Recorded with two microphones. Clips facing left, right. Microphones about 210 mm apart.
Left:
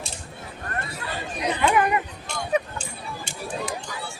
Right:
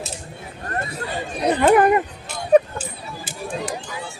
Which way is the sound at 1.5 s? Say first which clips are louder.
Right 7 dB; 50° right (ahead or behind).